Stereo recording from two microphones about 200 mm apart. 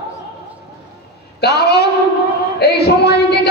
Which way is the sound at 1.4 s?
55° left (ahead or behind).